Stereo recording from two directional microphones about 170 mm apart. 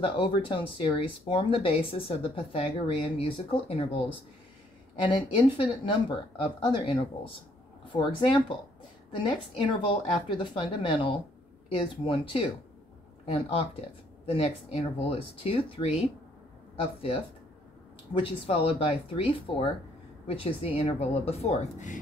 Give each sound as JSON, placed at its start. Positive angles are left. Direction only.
{"t": 0.0, "sound": "speech", "side_deg": 30}
{"t": 5.6, "sound": "speech", "side_deg": 30}
{"t": 18.1, "sound": "speech", "side_deg": 35}